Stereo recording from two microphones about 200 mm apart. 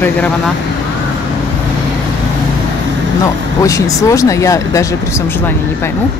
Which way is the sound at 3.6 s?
15° left (ahead or behind).